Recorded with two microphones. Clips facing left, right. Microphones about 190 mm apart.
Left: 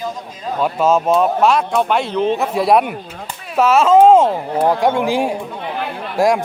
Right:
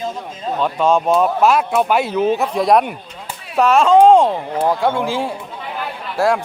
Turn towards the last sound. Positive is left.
turn(degrees=15)  # may be behind; listen again after turning